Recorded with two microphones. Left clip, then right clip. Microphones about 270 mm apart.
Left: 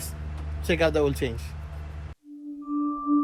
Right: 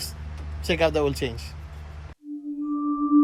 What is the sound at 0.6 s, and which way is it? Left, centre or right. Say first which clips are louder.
Speech: right 1 dB; centre.